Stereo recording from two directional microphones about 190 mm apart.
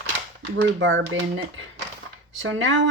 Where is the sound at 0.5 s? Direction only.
75° right (ahead or behind).